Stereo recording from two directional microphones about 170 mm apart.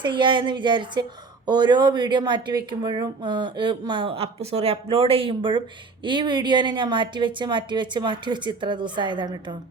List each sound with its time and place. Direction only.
0.0 s a woman's voice: 30° right (ahead or behind)